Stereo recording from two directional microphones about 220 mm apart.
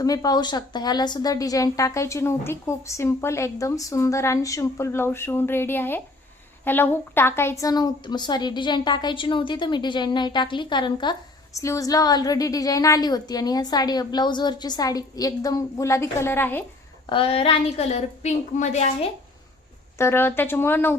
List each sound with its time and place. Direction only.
0.0 s a woman's voice: 15° left (ahead or behind)
17.1 s a woman's voice: 25° left (ahead or behind)
20.0 s a woman's voice: 10° left (ahead or behind)